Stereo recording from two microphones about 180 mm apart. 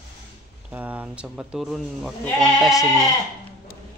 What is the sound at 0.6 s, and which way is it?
Speech, 10° right (ahead or behind).